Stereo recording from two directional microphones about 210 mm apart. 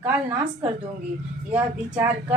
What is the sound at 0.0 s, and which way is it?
Speech, 10° right (ahead or behind).